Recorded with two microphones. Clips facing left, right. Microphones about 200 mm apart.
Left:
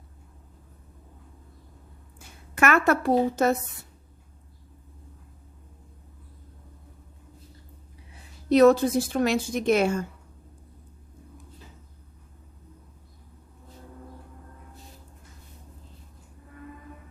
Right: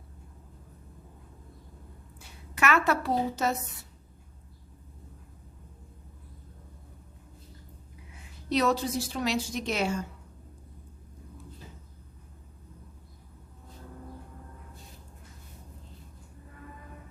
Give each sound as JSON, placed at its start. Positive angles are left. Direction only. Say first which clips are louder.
{"t": 2.2, "sound": "a woman's voice", "louder": "left 4 dB", "side_deg": 50}
{"t": 8.4, "sound": "speech", "louder": "left 10 dB", "side_deg": 50}